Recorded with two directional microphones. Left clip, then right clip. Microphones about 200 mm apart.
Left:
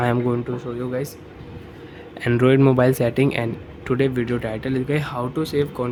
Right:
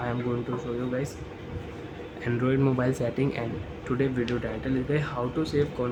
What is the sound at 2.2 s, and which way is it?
Speech, 50° left (ahead or behind).